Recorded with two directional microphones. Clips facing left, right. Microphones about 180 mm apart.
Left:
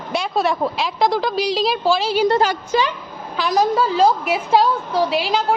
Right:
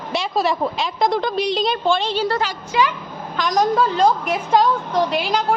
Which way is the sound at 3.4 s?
5° left (ahead or behind).